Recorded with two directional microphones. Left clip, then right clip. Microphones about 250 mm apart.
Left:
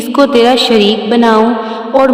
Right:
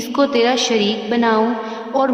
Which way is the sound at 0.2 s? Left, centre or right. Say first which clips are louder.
Left 8 dB; left.